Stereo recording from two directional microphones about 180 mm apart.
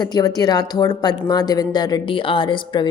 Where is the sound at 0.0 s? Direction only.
20° left (ahead or behind).